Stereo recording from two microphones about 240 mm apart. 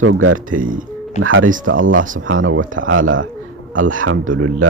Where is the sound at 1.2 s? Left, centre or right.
Right.